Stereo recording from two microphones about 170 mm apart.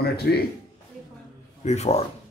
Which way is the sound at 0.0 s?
70° left (ahead or behind).